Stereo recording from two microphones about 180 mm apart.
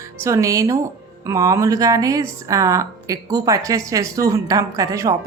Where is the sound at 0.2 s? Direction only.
15° right (ahead or behind).